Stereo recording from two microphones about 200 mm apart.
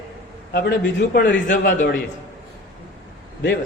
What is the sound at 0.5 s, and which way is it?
Speech, 55° left (ahead or behind).